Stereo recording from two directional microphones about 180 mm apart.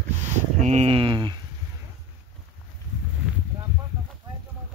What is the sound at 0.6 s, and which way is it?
Speech, 40° right (ahead or behind).